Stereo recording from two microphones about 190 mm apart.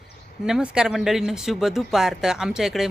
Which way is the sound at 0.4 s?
5° right (ahead or behind).